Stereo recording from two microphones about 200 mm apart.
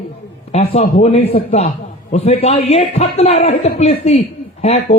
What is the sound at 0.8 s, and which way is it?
A man's voice, 35° left (ahead or behind).